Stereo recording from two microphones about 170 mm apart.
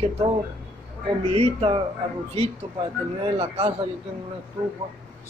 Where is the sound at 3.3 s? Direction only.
35° right (ahead or behind).